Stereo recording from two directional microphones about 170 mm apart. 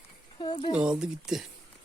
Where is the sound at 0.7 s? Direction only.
5° right (ahead or behind).